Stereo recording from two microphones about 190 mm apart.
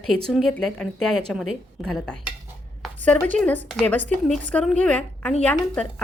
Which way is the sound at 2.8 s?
5° left (ahead or behind).